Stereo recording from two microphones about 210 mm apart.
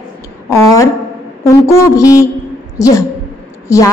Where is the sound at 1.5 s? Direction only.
15° left (ahead or behind).